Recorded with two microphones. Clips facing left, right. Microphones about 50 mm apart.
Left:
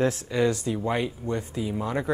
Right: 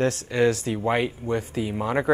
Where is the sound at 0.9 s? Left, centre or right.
Right.